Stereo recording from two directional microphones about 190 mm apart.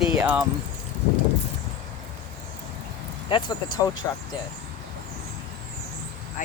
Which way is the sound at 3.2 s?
25° left (ahead or behind).